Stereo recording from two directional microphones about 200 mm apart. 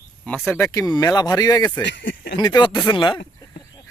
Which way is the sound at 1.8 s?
65° left (ahead or behind).